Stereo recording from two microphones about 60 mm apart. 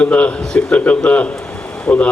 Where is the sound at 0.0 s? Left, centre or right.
Centre.